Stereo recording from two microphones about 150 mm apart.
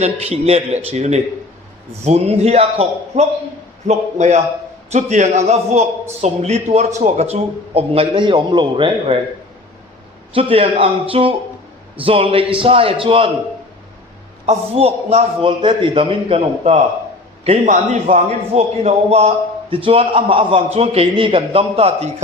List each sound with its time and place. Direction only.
0.0 s a man's voice: 45° right (ahead or behind)
10.3 s speech: 40° right (ahead or behind)
14.4 s a man's voice: 45° right (ahead or behind)